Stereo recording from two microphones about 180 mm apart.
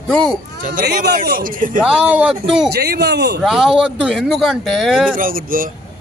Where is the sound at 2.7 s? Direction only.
65° right (ahead or behind).